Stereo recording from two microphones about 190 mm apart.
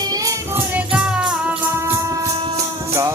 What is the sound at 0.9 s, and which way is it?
Music, 5° right (ahead or behind).